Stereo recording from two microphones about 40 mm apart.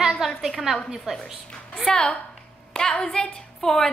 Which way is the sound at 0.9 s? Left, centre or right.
Centre.